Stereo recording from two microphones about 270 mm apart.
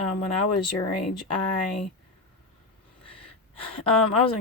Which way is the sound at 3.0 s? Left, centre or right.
Centre.